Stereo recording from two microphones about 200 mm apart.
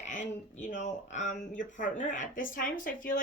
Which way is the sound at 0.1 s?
40° left (ahead or behind).